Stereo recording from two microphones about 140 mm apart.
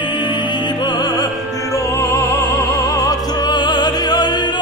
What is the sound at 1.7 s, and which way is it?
Opera, 20° left (ahead or behind).